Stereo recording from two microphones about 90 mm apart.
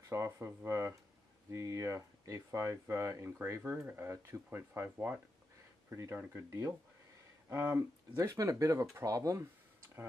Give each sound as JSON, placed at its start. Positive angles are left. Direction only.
{"t": 0.1, "sound": "speech", "side_deg": -30}
{"t": 8.3, "sound": "speech", "side_deg": -40}